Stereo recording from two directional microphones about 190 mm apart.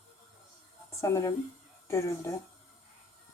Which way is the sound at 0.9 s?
15° left (ahead or behind).